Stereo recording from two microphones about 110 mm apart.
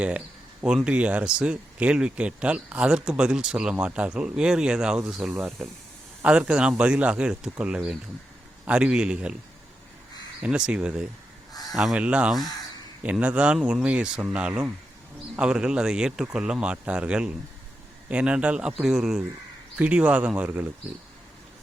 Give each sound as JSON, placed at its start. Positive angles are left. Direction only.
{"t": 0.9, "sound": "speech", "side_deg": -10}
{"t": 5.3, "sound": "speech", "side_deg": -15}
{"t": 10.4, "sound": "speech", "side_deg": -10}